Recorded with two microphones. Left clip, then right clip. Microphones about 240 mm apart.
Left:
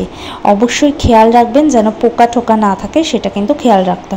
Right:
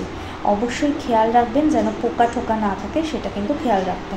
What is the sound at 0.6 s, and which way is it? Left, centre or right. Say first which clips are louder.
A woman's voice: left 10 dB; left.